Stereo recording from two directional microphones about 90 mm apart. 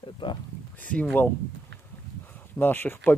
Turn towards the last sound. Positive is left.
turn(degrees=25)  # may be behind; listen again after turning